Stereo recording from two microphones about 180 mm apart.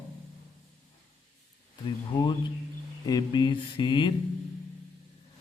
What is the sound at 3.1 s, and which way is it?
A man's voice, 25° left (ahead or behind).